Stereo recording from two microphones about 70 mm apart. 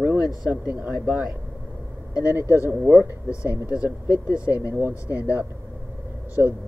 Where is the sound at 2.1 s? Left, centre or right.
Left.